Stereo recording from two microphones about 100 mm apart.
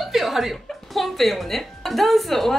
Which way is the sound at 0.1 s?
Centre (ahead or behind).